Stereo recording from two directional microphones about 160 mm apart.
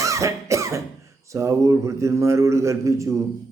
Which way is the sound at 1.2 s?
20° right (ahead or behind).